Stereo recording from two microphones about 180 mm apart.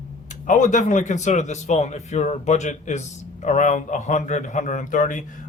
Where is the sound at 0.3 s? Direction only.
45° left (ahead or behind).